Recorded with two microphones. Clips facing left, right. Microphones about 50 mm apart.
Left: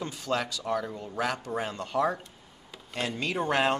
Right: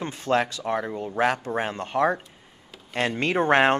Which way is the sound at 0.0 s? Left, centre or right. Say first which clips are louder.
Right 7 dB; right.